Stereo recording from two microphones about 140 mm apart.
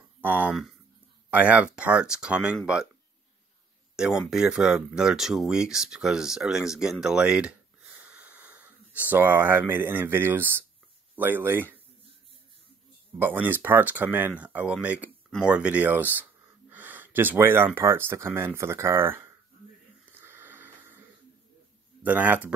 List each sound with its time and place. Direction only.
0.2 s speech: 15° right (ahead or behind)
3.9 s speech: 5° right (ahead or behind)
13.2 s speech: 15° right (ahead or behind)
20.1 s a sound: 15° right (ahead or behind)
22.0 s speech: 10° right (ahead or behind)